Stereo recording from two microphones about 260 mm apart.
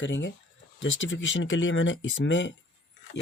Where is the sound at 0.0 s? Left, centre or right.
Left.